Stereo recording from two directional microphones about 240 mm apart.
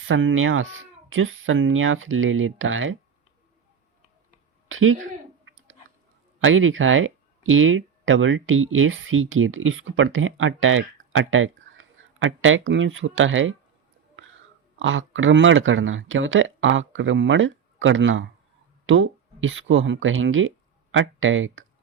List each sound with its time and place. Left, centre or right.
0.1 s speech: right
4.7 s speech: right
6.4 s speech: right
14.2 s whispering: right
14.8 s speech: right